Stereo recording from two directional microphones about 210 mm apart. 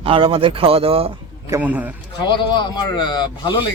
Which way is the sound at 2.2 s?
20° left (ahead or behind).